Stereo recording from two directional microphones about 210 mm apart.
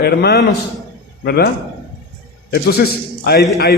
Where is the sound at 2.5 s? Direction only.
45° left (ahead or behind).